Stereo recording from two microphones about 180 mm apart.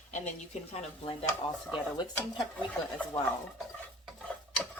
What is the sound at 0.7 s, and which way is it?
Speech, 35° left (ahead or behind).